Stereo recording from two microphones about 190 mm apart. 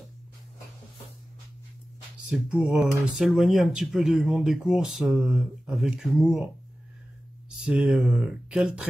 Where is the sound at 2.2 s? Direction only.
5° right (ahead or behind).